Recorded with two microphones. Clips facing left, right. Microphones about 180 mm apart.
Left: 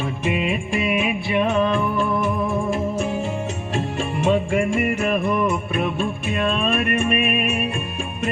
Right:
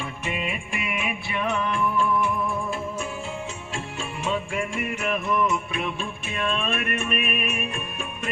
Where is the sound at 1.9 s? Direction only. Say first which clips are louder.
Left 3 dB; 40° left (ahead or behind).